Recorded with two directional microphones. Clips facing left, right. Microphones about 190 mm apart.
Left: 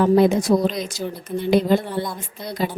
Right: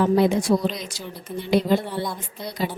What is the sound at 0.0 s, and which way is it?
Speech, 45° left (ahead or behind).